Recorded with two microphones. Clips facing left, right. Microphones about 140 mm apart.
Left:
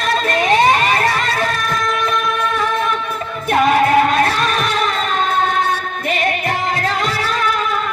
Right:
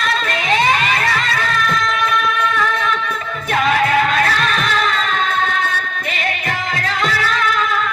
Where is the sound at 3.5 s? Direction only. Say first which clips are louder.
Left 3 dB; 40° left (ahead or behind).